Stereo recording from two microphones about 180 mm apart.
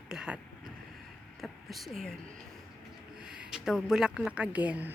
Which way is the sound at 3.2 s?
5° right (ahead or behind).